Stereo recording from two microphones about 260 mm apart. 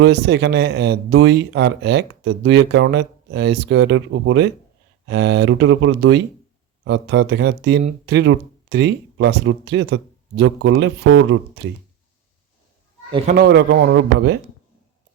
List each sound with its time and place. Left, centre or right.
0.0 s speech: right
13.2 s speech: right